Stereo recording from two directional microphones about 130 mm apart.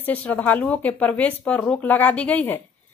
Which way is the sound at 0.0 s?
10° left (ahead or behind).